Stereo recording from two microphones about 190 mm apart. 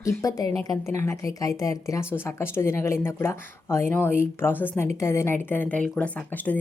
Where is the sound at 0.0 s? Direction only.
15° left (ahead or behind).